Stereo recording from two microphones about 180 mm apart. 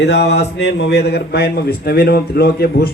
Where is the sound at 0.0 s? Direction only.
65° left (ahead or behind).